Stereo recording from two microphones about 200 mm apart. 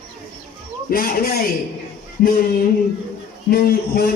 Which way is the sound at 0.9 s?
45° left (ahead or behind).